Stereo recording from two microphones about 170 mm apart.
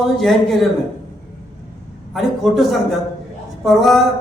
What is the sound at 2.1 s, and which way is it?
A man's voice, centre (ahead or behind).